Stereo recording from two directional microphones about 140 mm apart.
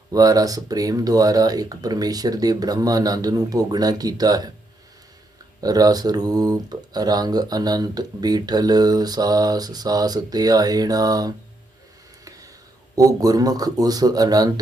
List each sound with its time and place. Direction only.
0.1 s speech: 25° right (ahead or behind)
5.5 s speech: 25° right (ahead or behind)
13.0 s speech: 25° right (ahead or behind)